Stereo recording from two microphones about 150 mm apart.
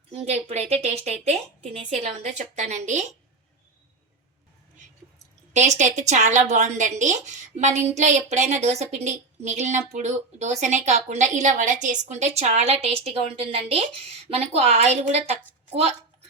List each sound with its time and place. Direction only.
0.3 s a woman's voice: 45° right (ahead or behind)
5.5 s a woman's voice: 50° right (ahead or behind)